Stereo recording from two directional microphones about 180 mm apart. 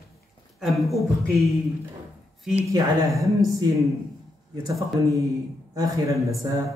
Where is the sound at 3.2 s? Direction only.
20° right (ahead or behind).